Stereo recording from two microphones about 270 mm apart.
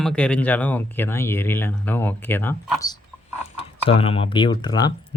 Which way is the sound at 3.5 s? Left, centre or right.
Left.